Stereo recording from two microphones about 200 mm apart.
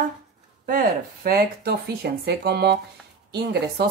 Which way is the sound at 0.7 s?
45° right (ahead or behind).